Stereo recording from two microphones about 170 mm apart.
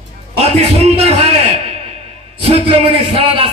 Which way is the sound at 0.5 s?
35° right (ahead or behind).